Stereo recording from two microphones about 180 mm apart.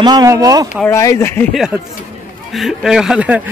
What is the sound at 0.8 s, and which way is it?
Speech, 15° left (ahead or behind).